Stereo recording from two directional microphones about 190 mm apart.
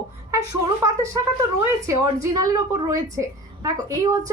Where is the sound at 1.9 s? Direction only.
20° right (ahead or behind).